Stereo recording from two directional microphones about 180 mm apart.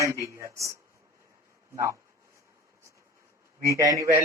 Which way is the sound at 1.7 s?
15° right (ahead or behind).